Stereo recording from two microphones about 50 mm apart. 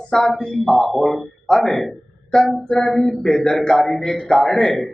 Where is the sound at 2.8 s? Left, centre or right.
Centre.